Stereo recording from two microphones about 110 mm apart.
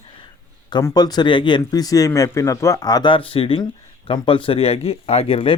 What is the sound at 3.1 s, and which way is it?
Speech, 55° left (ahead or behind).